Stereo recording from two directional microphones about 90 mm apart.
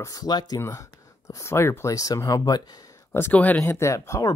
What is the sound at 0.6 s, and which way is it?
Speech, 30° left (ahead or behind).